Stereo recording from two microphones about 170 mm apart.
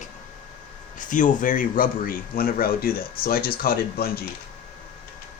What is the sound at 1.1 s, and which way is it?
Speech, 50° left (ahead or behind).